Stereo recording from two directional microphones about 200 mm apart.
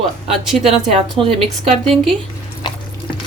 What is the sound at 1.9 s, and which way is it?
Speech, centre (ahead or behind).